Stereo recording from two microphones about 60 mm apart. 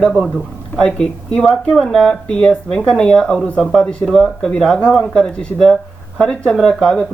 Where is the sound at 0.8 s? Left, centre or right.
Centre.